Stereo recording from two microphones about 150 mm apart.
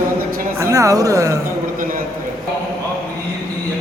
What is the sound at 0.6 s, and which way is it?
Speech, 20° right (ahead or behind).